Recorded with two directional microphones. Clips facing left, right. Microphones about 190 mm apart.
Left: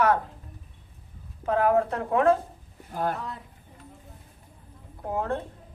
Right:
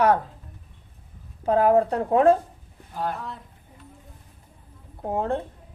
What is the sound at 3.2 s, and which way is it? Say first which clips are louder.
Speech: even; centre (ahead or behind).